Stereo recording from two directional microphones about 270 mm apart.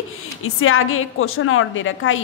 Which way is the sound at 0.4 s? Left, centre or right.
Left.